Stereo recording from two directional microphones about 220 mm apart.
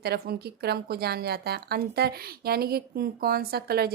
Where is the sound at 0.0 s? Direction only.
45° right (ahead or behind).